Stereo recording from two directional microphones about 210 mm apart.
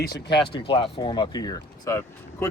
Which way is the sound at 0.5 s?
25° left (ahead or behind).